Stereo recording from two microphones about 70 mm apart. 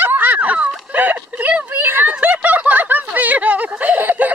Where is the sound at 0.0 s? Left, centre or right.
Right.